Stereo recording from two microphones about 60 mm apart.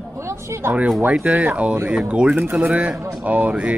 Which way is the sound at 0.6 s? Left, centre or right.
Right.